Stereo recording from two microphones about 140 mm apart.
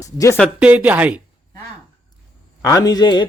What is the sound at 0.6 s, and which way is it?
Speech, 10° right (ahead or behind).